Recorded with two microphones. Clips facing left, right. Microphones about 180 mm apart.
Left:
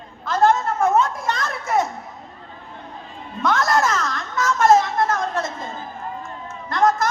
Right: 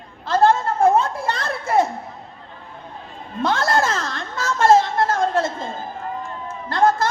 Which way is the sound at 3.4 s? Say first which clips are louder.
Even; 30° right (ahead or behind).